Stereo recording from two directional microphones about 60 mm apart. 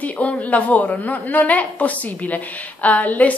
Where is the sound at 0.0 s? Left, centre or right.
Left.